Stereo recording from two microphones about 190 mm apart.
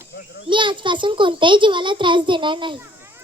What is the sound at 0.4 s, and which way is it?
A child's voice, 25° right (ahead or behind).